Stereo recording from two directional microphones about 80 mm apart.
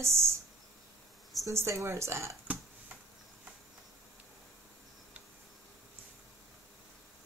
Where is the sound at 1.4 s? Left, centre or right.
Right.